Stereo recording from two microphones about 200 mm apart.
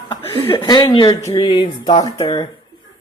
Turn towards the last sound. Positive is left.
turn(degrees=20)  # may be behind; listen again after turning